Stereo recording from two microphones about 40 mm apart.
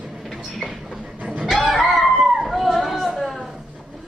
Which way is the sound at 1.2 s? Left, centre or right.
Right.